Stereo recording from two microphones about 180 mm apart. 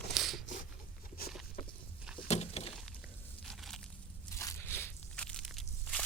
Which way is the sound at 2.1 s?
35° left (ahead or behind).